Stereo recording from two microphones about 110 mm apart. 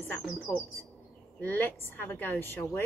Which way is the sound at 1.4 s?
15° left (ahead or behind).